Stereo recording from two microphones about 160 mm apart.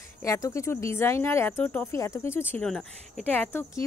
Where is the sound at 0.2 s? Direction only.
20° left (ahead or behind).